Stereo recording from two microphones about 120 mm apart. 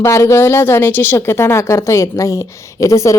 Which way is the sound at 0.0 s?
25° left (ahead or behind).